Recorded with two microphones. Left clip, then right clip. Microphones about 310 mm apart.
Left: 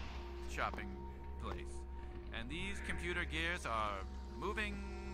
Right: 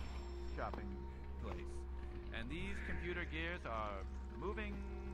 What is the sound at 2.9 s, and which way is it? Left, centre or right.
Speech, left.